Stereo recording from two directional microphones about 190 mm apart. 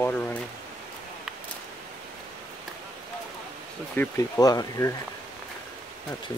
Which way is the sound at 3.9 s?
15° left (ahead or behind).